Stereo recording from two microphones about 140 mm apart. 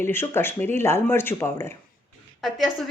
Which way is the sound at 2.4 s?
Centre (ahead or behind).